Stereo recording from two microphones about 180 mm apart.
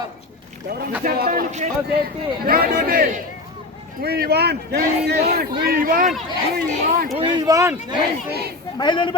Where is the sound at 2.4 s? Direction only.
55° right (ahead or behind).